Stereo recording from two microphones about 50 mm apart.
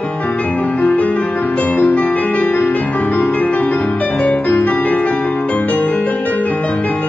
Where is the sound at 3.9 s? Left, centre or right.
Centre.